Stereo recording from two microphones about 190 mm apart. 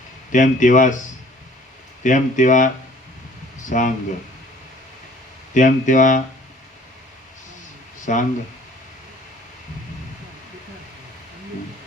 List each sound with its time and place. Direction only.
0.3 s speech: 40° left (ahead or behind)
2.0 s speech: 40° left (ahead or behind)
5.5 s speech: 40° left (ahead or behind)
8.0 s speech: 40° left (ahead or behind)